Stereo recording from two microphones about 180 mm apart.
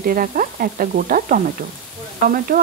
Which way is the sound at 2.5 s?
50° right (ahead or behind).